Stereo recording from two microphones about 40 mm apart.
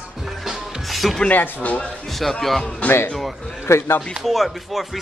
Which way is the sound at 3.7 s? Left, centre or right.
Left.